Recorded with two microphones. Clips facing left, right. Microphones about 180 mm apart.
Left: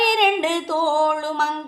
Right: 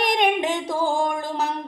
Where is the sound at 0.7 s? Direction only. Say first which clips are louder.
Left 3 dB; 20° right (ahead or behind).